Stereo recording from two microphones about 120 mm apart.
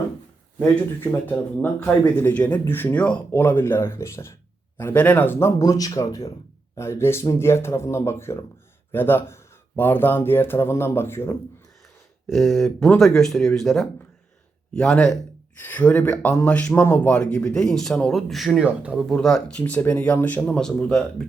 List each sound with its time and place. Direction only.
1.1 s speech: 20° left (ahead or behind)
12.3 s speech: centre (ahead or behind)
19.0 s speech: 5° left (ahead or behind)